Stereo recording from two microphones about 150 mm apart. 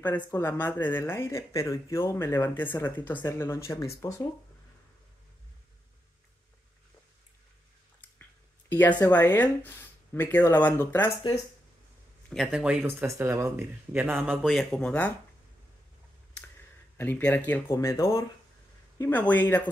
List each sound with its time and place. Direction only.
0.0 s speech: 10° left (ahead or behind)
8.6 s a sound: 15° left (ahead or behind)
9.0 s speech: 15° left (ahead or behind)
12.4 s speech: 5° right (ahead or behind)
13.0 s speech: 20° right (ahead or behind)
14.5 s speech: centre (ahead or behind)
16.9 s speech: 15° left (ahead or behind)